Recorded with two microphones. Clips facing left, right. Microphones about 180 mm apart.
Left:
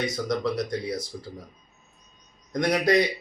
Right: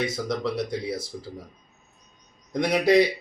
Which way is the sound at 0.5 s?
5° right (ahead or behind).